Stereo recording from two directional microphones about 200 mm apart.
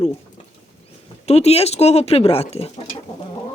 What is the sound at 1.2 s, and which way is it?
Speech, 30° left (ahead or behind).